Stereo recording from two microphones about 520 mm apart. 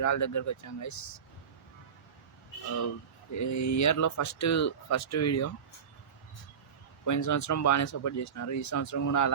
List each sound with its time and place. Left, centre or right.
0.0 s speech: left
3.3 s speech: left
7.0 s speech: left